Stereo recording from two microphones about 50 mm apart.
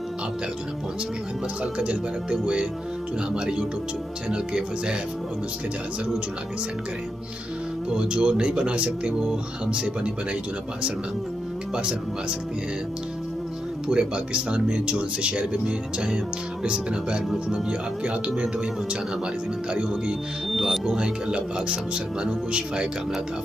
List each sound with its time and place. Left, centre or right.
1.6 s speech: right
7.9 s speech: centre
11.7 s speech: centre
13.8 s speech: centre
19.7 s speech: centre